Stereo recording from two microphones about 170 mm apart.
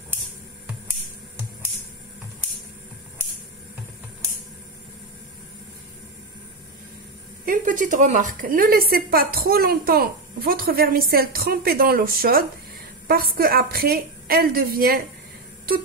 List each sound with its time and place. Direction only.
7.4 s a woman's voice: 50° right (ahead or behind)